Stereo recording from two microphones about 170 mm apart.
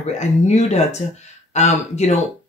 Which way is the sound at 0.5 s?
40° left (ahead or behind).